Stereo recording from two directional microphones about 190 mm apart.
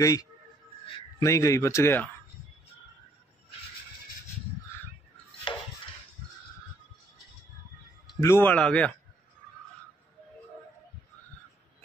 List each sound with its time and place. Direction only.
0.0 s speech: 15° left (ahead or behind)
8.2 s speech: 15° left (ahead or behind)